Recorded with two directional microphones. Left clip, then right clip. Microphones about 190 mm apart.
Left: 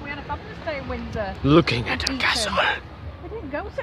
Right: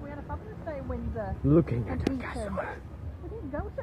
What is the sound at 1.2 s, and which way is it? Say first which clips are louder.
Speech: left 7 dB; 20° left (ahead or behind).